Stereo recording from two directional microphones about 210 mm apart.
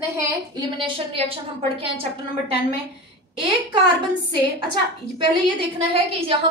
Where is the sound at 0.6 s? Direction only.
25° right (ahead or behind).